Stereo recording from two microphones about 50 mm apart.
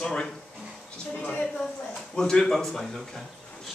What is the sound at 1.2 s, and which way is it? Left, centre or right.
Speech, left.